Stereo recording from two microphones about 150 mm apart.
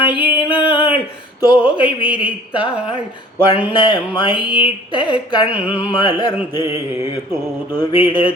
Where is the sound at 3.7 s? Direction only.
30° left (ahead or behind).